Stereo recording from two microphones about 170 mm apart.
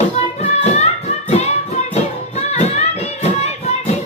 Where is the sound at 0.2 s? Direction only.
40° left (ahead or behind).